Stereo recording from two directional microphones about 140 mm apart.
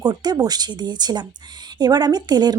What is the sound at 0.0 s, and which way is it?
A woman's voice, 30° right (ahead or behind).